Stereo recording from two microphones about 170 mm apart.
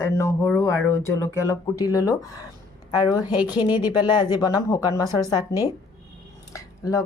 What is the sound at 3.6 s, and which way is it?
A woman's voice, 30° left (ahead or behind).